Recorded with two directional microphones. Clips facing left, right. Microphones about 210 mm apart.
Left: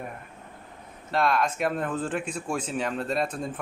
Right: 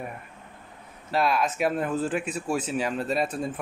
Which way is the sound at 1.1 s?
5° right (ahead or behind).